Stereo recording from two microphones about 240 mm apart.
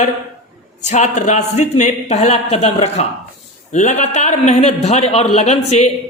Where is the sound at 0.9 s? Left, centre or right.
Left.